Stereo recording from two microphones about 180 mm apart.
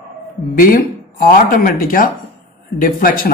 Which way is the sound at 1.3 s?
55° left (ahead or behind).